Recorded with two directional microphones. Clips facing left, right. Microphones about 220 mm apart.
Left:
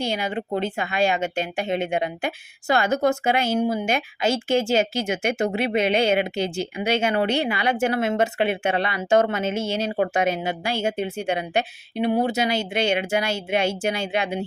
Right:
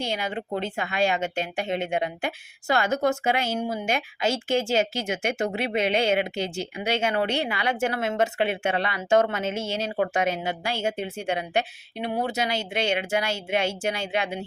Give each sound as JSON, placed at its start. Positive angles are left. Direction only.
{"t": 0.0, "sound": "speech", "side_deg": 10}
{"t": 9.9, "sound": "speech", "side_deg": 25}
{"t": 10.4, "sound": "speech", "side_deg": 10}